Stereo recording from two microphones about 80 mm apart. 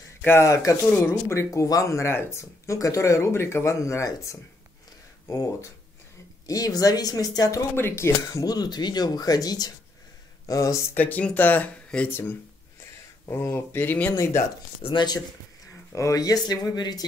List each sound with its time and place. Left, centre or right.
0.2 s speech: left
7.7 s speech: left
11.0 s speech: left
12.1 s speech: left
14.1 s speech: left
14.9 s speech: left
15.9 s speech: left